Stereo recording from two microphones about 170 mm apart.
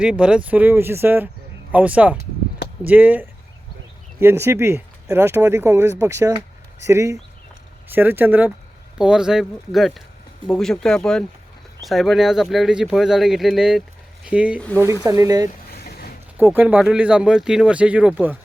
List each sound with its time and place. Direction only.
0.0 s speech: 5° right (ahead or behind)
15.0 s speech: 20° right (ahead or behind)
15.7 s a sound: 65° left (ahead or behind)
16.4 s speech: 10° right (ahead or behind)